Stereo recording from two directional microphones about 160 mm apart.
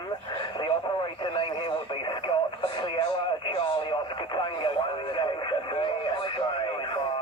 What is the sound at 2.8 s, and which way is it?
Speech, 30° left (ahead or behind).